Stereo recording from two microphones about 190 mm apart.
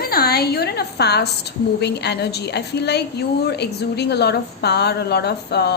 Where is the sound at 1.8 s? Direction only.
60° left (ahead or behind).